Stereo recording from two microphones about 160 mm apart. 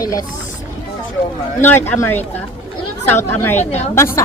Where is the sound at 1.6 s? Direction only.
15° left (ahead or behind).